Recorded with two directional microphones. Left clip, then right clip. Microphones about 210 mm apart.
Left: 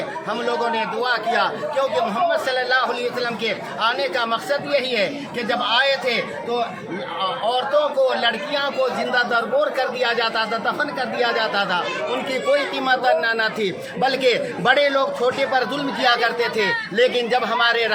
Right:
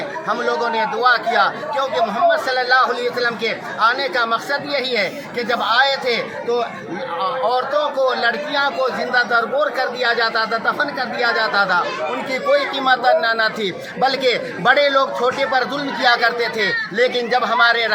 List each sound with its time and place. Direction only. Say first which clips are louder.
0.3 s a man's voice: right 3 dB; 5° left (ahead or behind)
7.2 s a man's voice: right 3 dB; centre (ahead or behind)